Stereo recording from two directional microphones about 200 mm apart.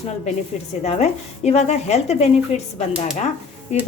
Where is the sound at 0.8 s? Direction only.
30° left (ahead or behind).